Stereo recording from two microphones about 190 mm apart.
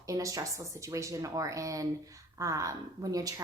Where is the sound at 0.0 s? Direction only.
15° right (ahead or behind).